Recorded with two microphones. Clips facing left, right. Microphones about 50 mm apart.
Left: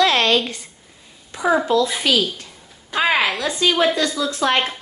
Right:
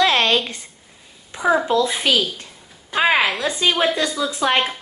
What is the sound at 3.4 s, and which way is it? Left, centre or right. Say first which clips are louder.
A woman's voice: left 1 dB; centre.